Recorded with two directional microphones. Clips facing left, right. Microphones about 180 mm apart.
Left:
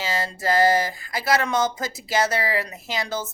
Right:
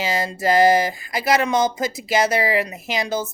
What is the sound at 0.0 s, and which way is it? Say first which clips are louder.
Speech: right 4 dB; 15° right (ahead or behind).